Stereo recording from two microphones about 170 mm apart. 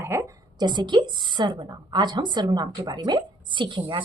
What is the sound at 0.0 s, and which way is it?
Speech, 15° right (ahead or behind).